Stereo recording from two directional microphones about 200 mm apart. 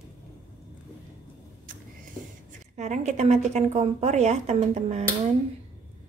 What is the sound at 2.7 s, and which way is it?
A woman's voice, 35° right (ahead or behind).